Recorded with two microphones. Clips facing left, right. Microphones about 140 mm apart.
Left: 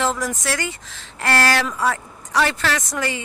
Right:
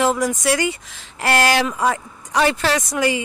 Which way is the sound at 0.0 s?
15° right (ahead or behind).